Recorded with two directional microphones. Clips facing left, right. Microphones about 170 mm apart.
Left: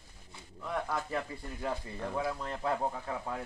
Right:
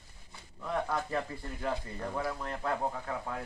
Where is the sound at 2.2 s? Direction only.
15° left (ahead or behind).